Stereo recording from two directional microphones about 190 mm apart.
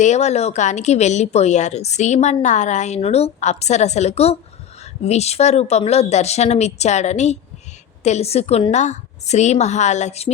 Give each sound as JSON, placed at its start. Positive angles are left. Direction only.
{"t": 0.0, "sound": "a woman's voice", "side_deg": 35}